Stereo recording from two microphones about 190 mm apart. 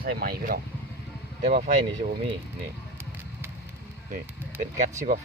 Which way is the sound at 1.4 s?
40° right (ahead or behind).